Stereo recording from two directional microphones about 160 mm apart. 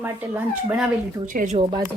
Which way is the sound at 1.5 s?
30° right (ahead or behind).